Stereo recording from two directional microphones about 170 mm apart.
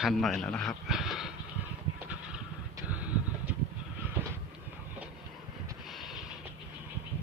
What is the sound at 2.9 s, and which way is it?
Vehicle, 10° right (ahead or behind).